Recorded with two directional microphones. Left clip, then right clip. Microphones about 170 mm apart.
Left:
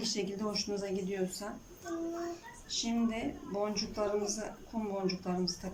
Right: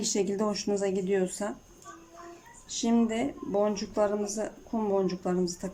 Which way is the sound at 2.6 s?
45° right (ahead or behind).